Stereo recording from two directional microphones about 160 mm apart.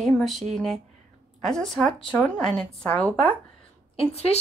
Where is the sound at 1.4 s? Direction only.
5° left (ahead or behind).